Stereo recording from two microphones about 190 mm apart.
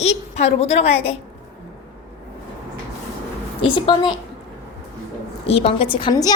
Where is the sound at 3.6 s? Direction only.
25° left (ahead or behind).